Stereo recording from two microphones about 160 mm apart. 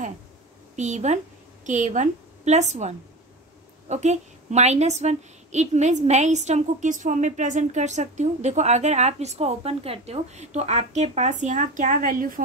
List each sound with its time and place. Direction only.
0.7 s a woman's voice: 50° right (ahead or behind)